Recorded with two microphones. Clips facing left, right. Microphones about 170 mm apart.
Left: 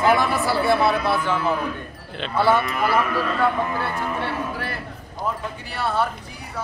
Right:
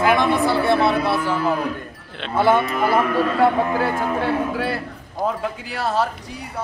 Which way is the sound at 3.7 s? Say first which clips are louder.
Right 5 dB; 50° right (ahead or behind).